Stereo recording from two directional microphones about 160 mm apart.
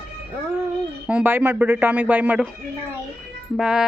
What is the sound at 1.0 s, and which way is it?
Speech, 10° right (ahead or behind).